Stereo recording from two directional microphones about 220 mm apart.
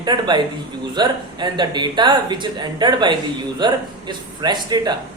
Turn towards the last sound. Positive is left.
turn(degrees=-20)  # may be behind; listen again after turning